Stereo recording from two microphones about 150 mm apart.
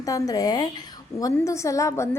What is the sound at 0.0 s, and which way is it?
A woman's voice, 25° left (ahead or behind).